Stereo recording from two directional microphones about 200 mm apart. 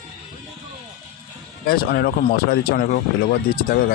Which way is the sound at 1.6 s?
50° left (ahead or behind).